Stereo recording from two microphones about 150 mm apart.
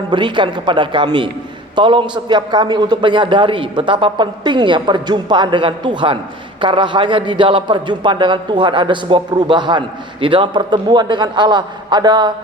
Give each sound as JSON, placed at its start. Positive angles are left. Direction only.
{"t": 0.1, "sound": "a man's voice", "side_deg": -30}